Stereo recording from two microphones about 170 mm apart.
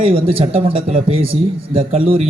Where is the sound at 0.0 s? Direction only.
35° right (ahead or behind).